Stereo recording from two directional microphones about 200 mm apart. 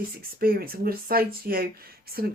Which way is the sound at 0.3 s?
50° right (ahead or behind).